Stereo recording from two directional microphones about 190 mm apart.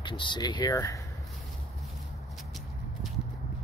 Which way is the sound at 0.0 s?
25° left (ahead or behind).